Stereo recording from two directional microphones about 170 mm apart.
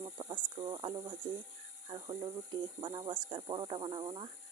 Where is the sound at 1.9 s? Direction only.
30° right (ahead or behind).